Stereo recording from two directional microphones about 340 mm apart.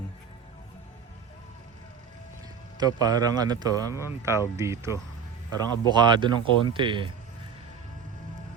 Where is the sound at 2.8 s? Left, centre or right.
Centre.